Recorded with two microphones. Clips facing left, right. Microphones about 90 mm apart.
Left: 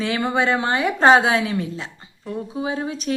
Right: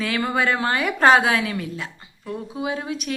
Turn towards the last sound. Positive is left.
turn(degrees=30)  # may be behind; listen again after turning